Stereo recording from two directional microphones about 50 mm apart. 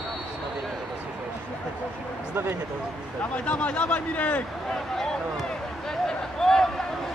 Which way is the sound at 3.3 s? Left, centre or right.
Left.